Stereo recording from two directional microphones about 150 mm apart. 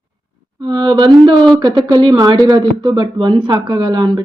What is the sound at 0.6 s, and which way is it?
Speech, 30° right (ahead or behind).